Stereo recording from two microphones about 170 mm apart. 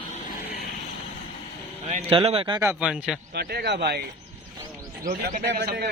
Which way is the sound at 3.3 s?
70° right (ahead or behind).